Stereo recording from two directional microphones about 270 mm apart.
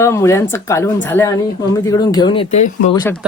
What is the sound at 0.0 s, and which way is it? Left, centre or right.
Speech, centre.